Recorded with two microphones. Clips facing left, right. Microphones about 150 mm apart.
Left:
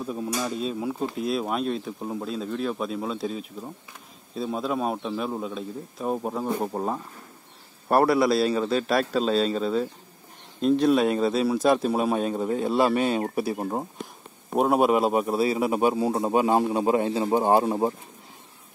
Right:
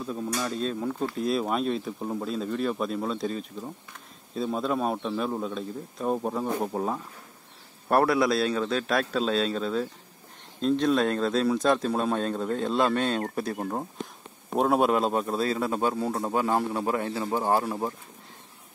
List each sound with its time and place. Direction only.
0.0 s a man's voice: 10° left (ahead or behind)